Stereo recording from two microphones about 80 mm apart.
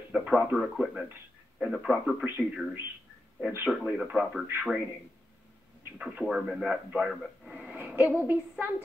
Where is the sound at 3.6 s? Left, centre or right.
Centre.